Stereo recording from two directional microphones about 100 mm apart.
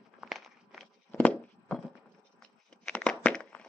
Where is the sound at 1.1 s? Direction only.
15° left (ahead or behind).